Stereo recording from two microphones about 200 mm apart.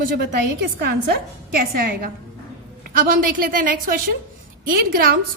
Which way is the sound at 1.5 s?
45° right (ahead or behind).